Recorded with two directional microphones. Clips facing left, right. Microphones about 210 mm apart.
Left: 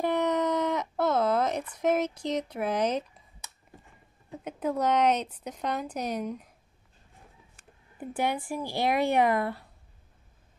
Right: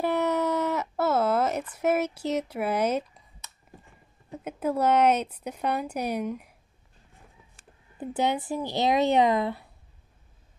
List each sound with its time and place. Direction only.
0.0 s a sound: 5° right (ahead or behind)
4.5 s speech: 5° right (ahead or behind)
8.0 s speech: 20° right (ahead or behind)